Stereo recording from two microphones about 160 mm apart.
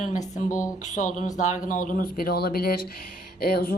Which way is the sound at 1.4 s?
50° left (ahead or behind).